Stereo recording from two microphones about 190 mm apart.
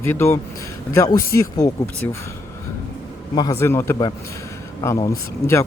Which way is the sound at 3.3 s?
15° left (ahead or behind).